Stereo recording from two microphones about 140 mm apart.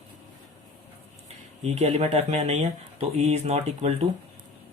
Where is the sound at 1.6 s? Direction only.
50° right (ahead or behind).